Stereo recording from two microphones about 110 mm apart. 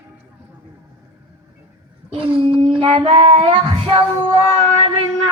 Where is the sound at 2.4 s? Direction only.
55° right (ahead or behind).